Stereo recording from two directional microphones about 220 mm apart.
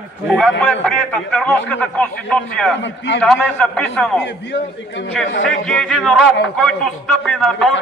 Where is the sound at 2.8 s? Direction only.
55° left (ahead or behind).